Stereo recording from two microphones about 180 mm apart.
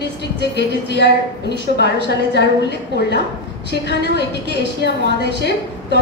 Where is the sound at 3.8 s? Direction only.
75° left (ahead or behind).